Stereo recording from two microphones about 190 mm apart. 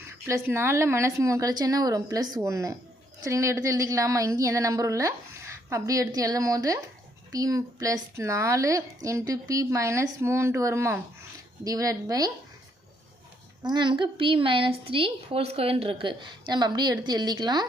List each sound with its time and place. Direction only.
0.3 s a woman's voice: 15° right (ahead or behind)
13.6 s a woman's voice: 25° right (ahead or behind)